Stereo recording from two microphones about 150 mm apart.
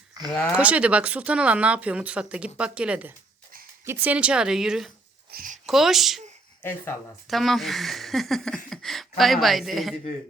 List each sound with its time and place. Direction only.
0.5 s speech: 10° right (ahead or behind)
5.3 s speech: 70° right (ahead or behind)
5.6 s speech: centre (ahead or behind)
6.6 s speech: 15° left (ahead or behind)
7.3 s speech: centre (ahead or behind)